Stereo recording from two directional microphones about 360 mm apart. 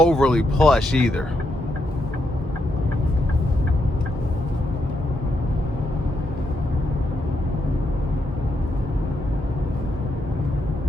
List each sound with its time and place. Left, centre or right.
0.0 s speech: centre